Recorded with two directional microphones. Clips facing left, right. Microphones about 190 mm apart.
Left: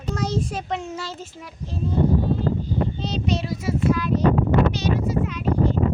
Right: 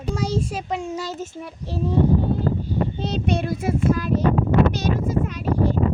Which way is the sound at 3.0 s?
55° right (ahead or behind).